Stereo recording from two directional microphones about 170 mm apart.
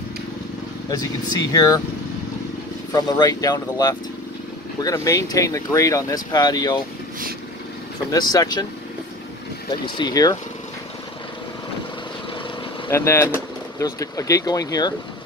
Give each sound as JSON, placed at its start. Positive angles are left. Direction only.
{"t": 0.8, "sound": "speech", "side_deg": 20}
{"t": 2.9, "sound": "speech", "side_deg": 25}
{"t": 8.1, "sound": "speech", "side_deg": 25}
{"t": 9.9, "sound": "speech", "side_deg": 25}
{"t": 12.9, "sound": "speech", "side_deg": 15}